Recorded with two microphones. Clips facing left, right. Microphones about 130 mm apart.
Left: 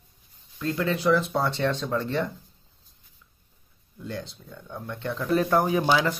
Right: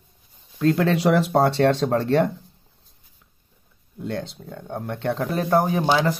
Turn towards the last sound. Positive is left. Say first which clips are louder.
# right 2 dB
turn(degrees=-30)  # may be behind; listen again after turning